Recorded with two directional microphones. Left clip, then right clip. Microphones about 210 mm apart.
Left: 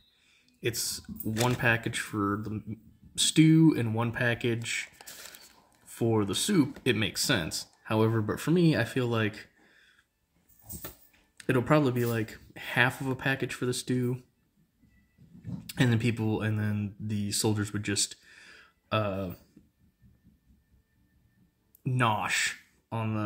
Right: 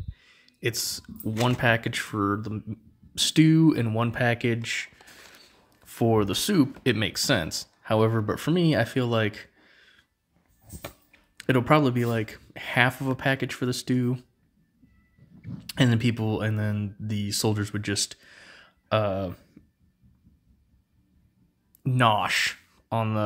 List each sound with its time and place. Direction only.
0.2 s speech: 35° right (ahead or behind)
11.3 s speech: 35° right (ahead or behind)
15.6 s speech: 35° right (ahead or behind)
19.6 s cough: 30° right (ahead or behind)
21.8 s speech: 35° right (ahead or behind)